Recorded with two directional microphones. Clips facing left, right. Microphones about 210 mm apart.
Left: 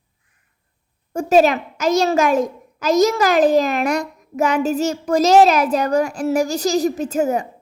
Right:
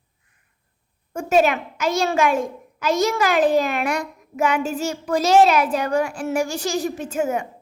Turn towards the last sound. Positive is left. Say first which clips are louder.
# left 4 dB
turn(degrees=35)  # may be behind; listen again after turning